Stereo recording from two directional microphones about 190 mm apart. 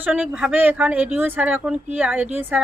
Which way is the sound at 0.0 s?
5° right (ahead or behind).